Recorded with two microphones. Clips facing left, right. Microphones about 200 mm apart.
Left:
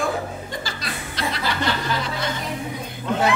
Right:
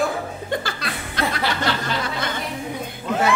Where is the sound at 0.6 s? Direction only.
60° right (ahead or behind).